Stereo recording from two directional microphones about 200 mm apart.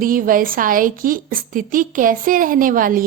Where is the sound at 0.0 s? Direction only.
45° right (ahead or behind).